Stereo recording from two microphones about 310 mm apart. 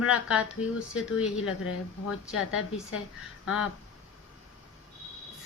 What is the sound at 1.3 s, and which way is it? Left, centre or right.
Speech, left.